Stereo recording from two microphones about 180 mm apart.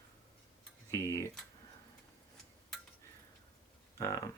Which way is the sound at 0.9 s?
15° left (ahead or behind).